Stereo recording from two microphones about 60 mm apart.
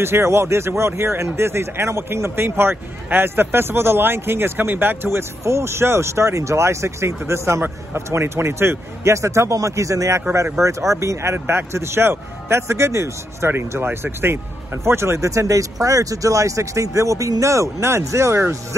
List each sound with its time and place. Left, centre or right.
0.0 s a man's voice: right
5.4 s a man's voice: right